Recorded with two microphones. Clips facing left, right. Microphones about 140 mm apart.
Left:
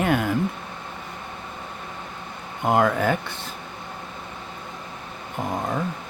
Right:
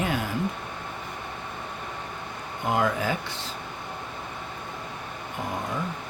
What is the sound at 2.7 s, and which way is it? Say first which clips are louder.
Speech: left 5 dB; 55° left (ahead or behind).